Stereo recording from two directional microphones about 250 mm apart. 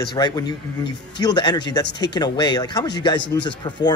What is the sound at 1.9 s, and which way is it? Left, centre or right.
Speech, left.